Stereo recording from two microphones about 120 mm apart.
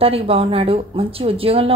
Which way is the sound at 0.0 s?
50° right (ahead or behind).